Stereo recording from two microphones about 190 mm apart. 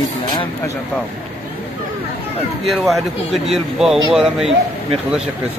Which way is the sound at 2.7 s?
Centre (ahead or behind).